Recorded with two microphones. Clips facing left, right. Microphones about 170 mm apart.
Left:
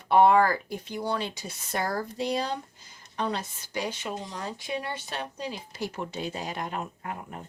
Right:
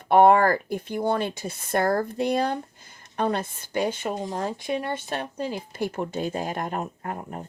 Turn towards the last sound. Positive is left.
turn(degrees=-40)  # may be behind; listen again after turning